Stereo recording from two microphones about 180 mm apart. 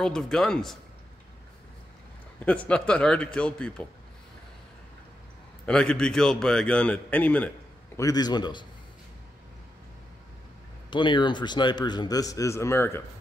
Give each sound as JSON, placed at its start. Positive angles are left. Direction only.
{"t": 0.0, "sound": "a man's voice", "side_deg": 5}
{"t": 2.4, "sound": "a man's voice", "side_deg": 5}
{"t": 5.7, "sound": "a man's voice", "side_deg": 5}
{"t": 8.0, "sound": "a man's voice", "side_deg": 20}
{"t": 10.9, "sound": "a man's voice", "side_deg": 25}